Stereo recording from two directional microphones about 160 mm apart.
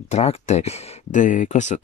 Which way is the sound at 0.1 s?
40° left (ahead or behind).